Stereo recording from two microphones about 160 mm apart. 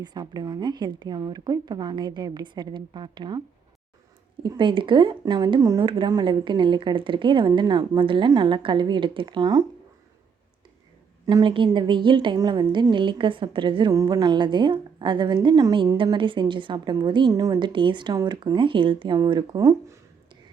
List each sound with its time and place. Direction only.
0.0 s speech: 25° right (ahead or behind)
4.4 s speech: 30° right (ahead or behind)
11.3 s speech: 25° right (ahead or behind)